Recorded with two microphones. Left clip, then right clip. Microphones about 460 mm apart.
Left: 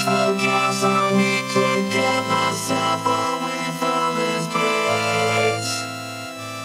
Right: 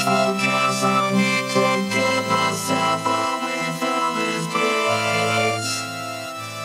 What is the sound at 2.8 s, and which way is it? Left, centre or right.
Music, left.